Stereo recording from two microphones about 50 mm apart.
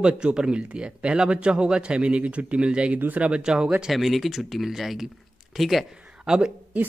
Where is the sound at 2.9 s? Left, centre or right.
Right.